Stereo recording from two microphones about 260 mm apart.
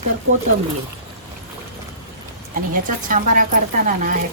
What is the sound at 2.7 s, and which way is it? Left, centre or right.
Speech, right.